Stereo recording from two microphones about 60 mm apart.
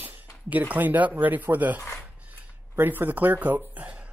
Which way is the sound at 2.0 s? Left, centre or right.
Right.